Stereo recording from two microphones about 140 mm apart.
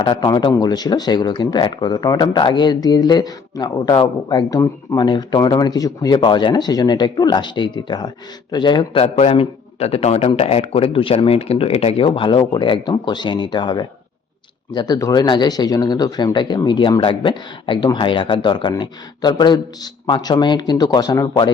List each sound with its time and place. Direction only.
0.0 s a man's voice: 35° left (ahead or behind)